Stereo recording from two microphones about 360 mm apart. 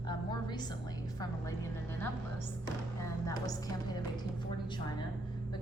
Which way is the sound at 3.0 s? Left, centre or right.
Centre.